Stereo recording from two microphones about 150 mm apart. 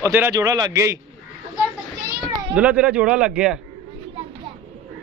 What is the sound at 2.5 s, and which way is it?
Speech, 10° right (ahead or behind).